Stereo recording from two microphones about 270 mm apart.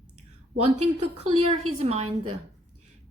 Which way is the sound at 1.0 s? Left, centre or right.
Right.